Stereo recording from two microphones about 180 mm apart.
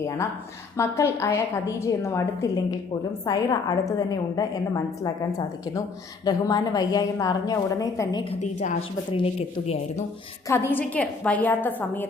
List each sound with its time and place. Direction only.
0.8 s a woman's voice: 15° left (ahead or behind)
9.1 s speech: 35° left (ahead or behind)
10.4 s a woman's voice: 15° left (ahead or behind)